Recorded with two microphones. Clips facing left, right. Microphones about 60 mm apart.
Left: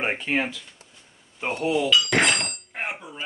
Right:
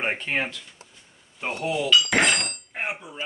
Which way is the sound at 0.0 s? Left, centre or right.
Centre.